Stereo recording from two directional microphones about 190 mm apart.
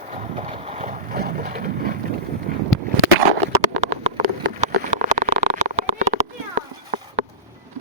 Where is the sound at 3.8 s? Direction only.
35° right (ahead or behind).